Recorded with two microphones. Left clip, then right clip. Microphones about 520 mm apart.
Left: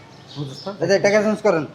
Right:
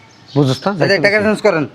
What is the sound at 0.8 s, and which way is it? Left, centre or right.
Speech, right.